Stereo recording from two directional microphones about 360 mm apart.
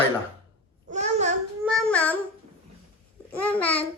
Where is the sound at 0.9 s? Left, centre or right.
Centre.